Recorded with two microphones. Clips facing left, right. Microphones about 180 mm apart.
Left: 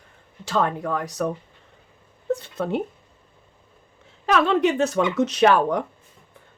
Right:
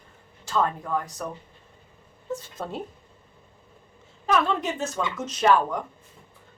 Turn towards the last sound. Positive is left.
turn(degrees=70)  # may be behind; listen again after turning